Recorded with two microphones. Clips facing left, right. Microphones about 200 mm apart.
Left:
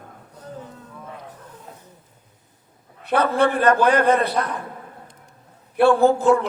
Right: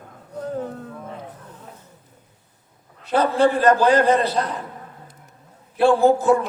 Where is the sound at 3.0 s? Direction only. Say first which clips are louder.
Even; 60° left (ahead or behind).